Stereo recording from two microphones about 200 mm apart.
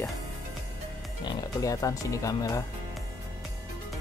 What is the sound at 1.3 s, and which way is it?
Speech, 15° left (ahead or behind).